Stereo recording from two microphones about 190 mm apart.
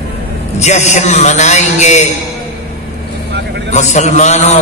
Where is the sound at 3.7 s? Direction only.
40° left (ahead or behind).